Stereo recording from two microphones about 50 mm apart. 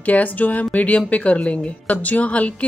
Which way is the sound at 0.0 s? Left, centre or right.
Left.